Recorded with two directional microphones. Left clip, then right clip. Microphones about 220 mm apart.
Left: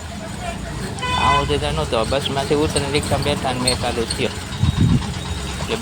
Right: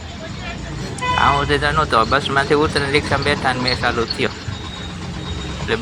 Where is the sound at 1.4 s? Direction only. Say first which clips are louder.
Right 5 dB; centre (ahead or behind).